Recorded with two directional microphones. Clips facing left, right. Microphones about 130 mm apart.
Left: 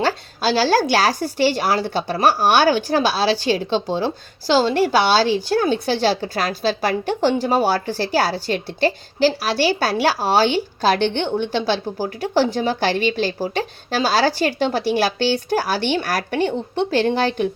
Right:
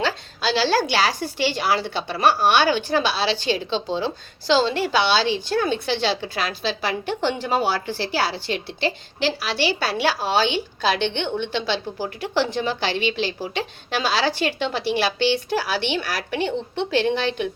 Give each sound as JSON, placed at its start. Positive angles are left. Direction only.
{"t": 0.0, "sound": "a woman's voice", "side_deg": 40}